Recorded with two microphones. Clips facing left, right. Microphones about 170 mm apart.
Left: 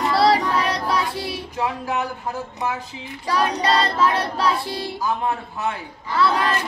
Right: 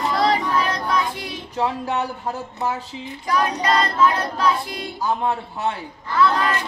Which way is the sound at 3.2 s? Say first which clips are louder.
Even; 30° left (ahead or behind).